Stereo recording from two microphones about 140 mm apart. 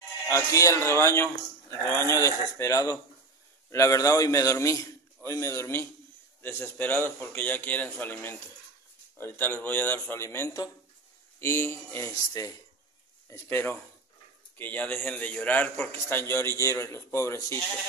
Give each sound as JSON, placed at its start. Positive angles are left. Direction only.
{"t": 0.3, "sound": "a man's voice", "side_deg": 20}